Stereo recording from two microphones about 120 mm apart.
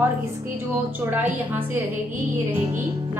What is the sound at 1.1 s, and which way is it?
A woman's voice, 15° right (ahead or behind).